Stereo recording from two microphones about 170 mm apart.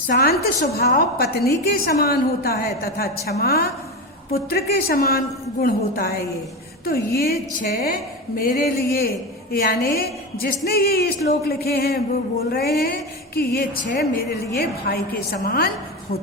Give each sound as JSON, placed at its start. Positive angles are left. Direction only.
{"t": 0.1, "sound": "a woman's voice", "side_deg": 65}